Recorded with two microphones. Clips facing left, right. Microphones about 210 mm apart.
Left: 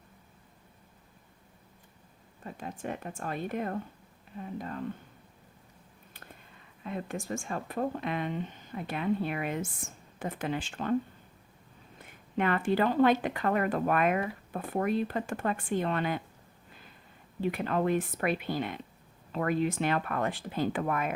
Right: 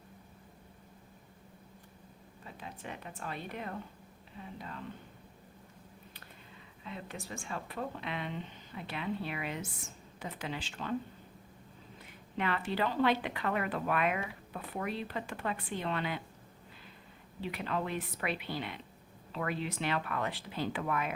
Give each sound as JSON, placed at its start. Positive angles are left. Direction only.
{"t": 2.4, "sound": "speech", "side_deg": 45}
{"t": 6.8, "sound": "speech", "side_deg": 50}
{"t": 11.9, "sound": "speech", "side_deg": 50}
{"t": 17.4, "sound": "speech", "side_deg": 50}